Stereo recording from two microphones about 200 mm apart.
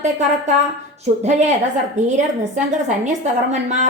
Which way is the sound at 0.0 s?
35° right (ahead or behind).